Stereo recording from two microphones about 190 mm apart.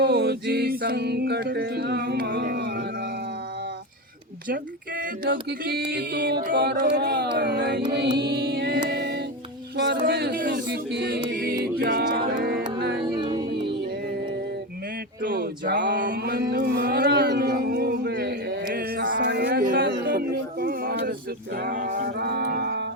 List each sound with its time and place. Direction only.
0.0 s music: 60° right (ahead or behind)
4.4 s music: 50° right (ahead or behind)
9.7 s a sound: 65° right (ahead or behind)
10.0 s music: 55° right (ahead or behind)
11.3 s music: 50° right (ahead or behind)
13.0 s music: 25° right (ahead or behind)
15.3 s a sound: 65° right (ahead or behind)
16.0 s mantra: 50° right (ahead or behind)
19.1 s music: 60° right (ahead or behind)